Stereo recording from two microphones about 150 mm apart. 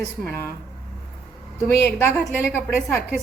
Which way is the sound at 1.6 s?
15° left (ahead or behind).